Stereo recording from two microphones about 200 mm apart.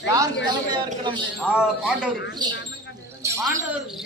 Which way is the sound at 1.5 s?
5° right (ahead or behind).